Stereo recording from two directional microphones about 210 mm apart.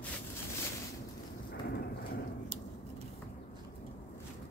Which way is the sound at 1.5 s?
50° left (ahead or behind).